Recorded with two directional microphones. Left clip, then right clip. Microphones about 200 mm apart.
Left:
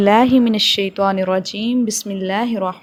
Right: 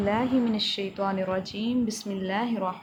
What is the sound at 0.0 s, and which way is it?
A woman's voice, 50° left (ahead or behind).